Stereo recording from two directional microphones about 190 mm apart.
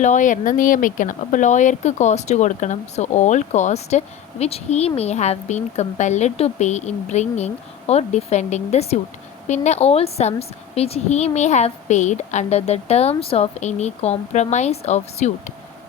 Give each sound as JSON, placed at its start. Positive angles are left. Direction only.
{"t": 0.0, "sound": "speech", "side_deg": 40}